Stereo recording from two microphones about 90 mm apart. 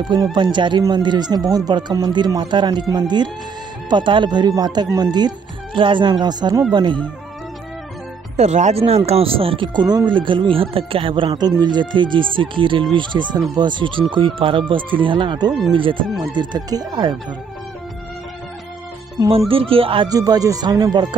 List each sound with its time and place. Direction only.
0.0 s speech: 55° right (ahead or behind)
5.8 s speech: 65° right (ahead or behind)
9.1 s speech: 90° right
9.8 s speech: 55° right (ahead or behind); by 11.3 s 75° right (ahead or behind)
11.6 s speech: 55° right (ahead or behind)
12.9 s speech: 60° right (ahead or behind)
14.1 s speech: 80° right
14.7 s speech: 70° right (ahead or behind)
15.7 s speech: 70° right (ahead or behind)
16.2 s speech: 50° right (ahead or behind)
19.2 s speech: 90° right
20.1 s speech: 45° right (ahead or behind)